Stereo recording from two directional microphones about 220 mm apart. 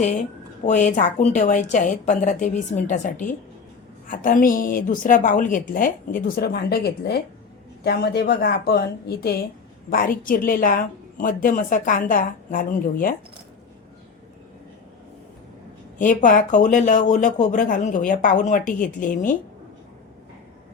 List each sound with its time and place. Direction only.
0.6 s a woman's voice: 35° left (ahead or behind)
16.0 s a woman's voice: 35° left (ahead or behind)